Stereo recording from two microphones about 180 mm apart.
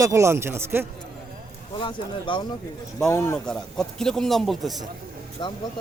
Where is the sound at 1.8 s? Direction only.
25° left (ahead or behind).